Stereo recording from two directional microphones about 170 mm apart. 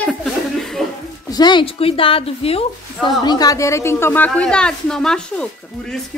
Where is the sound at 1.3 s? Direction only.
25° left (ahead or behind).